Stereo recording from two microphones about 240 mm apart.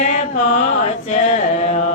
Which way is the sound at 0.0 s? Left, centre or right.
Left.